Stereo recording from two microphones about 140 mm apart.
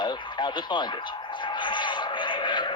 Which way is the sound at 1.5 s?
35° left (ahead or behind).